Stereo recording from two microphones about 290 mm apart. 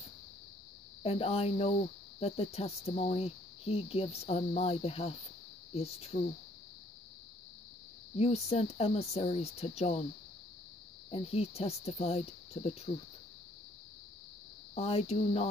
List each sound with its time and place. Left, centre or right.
1.0 s speech: centre
8.2 s speech: left
11.1 s speech: centre
14.8 s speech: left